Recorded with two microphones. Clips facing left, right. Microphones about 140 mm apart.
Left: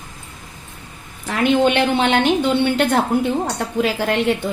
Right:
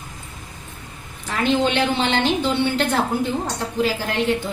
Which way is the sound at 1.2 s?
60° left (ahead or behind).